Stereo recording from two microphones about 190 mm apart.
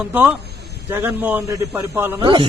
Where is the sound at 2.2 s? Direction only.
25° right (ahead or behind).